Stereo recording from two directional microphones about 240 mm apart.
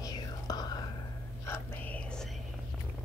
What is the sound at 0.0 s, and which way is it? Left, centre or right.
Whispering, centre.